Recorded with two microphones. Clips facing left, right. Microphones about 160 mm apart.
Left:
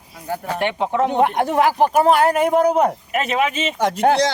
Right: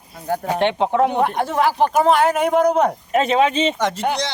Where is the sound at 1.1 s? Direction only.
15° left (ahead or behind).